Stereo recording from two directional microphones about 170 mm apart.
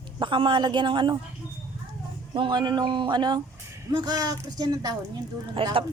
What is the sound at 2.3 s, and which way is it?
Speech, 25° right (ahead or behind).